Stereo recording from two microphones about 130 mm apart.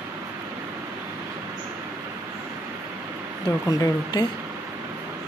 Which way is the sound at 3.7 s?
30° left (ahead or behind).